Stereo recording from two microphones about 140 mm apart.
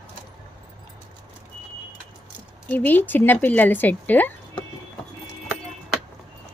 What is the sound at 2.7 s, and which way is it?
Speech, 15° left (ahead or behind).